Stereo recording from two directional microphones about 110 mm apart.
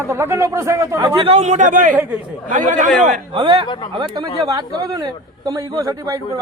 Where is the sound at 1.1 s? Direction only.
55° right (ahead or behind).